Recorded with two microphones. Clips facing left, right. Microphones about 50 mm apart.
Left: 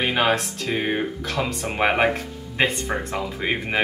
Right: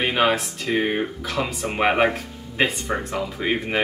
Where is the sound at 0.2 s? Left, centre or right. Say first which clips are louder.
Right 1 dB; centre.